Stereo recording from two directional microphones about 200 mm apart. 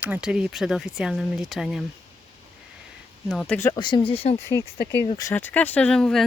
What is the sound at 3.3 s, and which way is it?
Speech, 5° left (ahead or behind).